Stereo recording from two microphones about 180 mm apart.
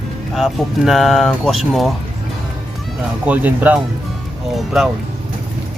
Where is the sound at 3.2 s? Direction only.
10° right (ahead or behind).